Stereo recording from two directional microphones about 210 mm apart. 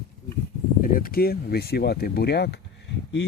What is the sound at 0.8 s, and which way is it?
Speech, 45° left (ahead or behind).